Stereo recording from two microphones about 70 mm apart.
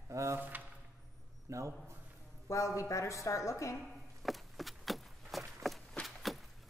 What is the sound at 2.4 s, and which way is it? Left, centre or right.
A woman's voice, left.